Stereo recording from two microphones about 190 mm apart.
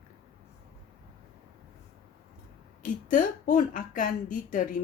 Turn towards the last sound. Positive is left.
turn(degrees=45)  # may be behind; listen again after turning